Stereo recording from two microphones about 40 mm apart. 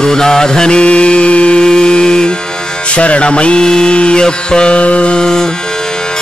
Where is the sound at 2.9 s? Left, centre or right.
Left.